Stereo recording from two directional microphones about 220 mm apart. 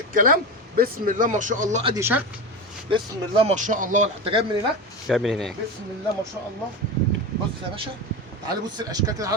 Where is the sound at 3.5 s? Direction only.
35° right (ahead or behind).